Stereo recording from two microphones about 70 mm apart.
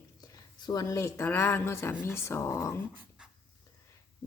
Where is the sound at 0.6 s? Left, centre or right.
Left.